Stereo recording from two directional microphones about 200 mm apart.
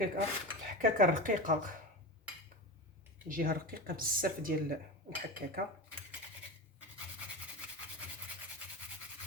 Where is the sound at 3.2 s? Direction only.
45° right (ahead or behind).